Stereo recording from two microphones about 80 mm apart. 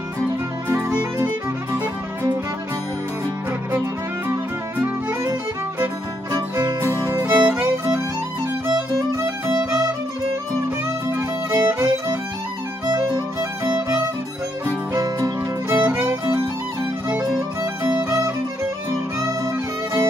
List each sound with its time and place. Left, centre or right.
7.0 s music: right
7.2 s music: centre
8.6 s music: right
11.1 s music: right
12.8 s music: right
13.4 s music: right
15.0 s music: right
15.9 s music: right
17.9 s music: right